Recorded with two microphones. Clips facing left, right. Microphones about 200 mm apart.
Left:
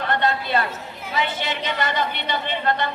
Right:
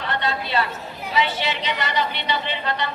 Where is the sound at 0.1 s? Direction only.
50° left (ahead or behind).